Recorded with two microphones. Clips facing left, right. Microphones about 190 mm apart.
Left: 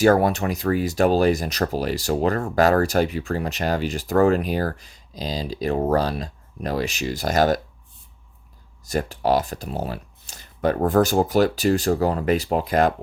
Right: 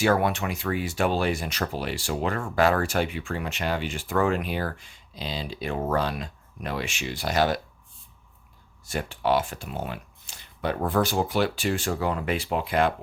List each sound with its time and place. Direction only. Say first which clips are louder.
0.0 s speech: left 6 dB; 40° left (ahead or behind)
8.8 s speech: left 5 dB; 40° left (ahead or behind)